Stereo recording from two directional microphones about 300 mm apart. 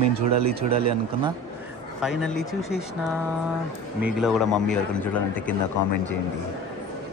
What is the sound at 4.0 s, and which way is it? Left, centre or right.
Speech, centre.